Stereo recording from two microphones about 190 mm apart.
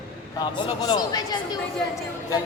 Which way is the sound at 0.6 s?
25° left (ahead or behind).